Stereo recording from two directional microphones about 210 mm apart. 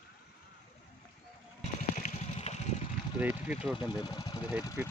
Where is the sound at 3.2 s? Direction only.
5° right (ahead or behind).